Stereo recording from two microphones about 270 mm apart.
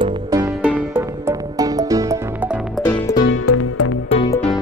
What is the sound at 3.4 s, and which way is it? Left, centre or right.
Music, left.